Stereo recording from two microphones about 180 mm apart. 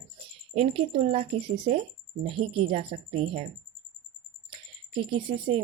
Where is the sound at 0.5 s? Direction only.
30° right (ahead or behind).